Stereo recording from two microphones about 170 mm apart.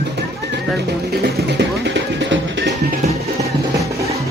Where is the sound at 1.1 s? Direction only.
75° right (ahead or behind); by 2.7 s 90° right.